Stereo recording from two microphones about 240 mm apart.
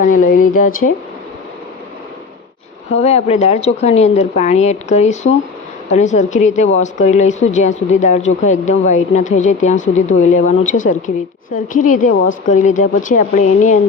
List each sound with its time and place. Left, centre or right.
0.0 s speech: left
2.9 s speech: left